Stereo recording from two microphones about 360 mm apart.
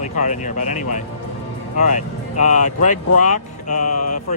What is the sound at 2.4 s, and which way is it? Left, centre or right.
Speech, centre.